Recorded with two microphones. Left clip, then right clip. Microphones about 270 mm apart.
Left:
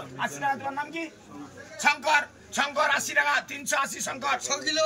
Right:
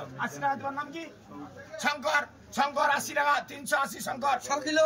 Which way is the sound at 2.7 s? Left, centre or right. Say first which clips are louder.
Left 5 dB; centre.